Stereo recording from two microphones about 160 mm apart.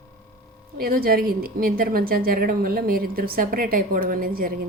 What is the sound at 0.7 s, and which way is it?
A woman's voice, 70° right (ahead or behind).